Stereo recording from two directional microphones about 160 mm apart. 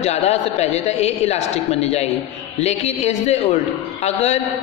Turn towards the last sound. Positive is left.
turn(degrees=40)  # may be behind; listen again after turning